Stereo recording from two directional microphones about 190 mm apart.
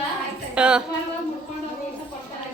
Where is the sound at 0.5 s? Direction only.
5° right (ahead or behind).